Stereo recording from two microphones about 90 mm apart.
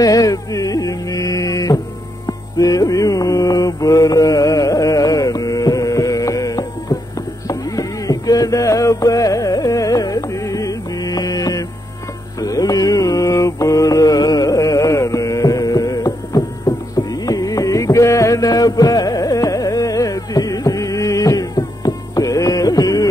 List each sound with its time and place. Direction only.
0.0 s mantra: 40° left (ahead or behind)
2.2 s music: 40° left (ahead or behind)
12.4 s carnatic music: 40° left (ahead or behind)